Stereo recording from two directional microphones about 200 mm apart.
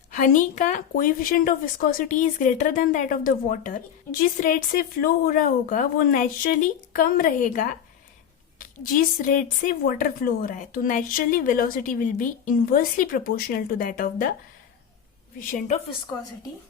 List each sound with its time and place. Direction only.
0.1 s a woman's voice: 40° left (ahead or behind)
15.4 s a woman's voice: 40° left (ahead or behind)